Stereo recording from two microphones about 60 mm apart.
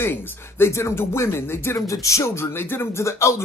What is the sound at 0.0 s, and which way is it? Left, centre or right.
Speech, left.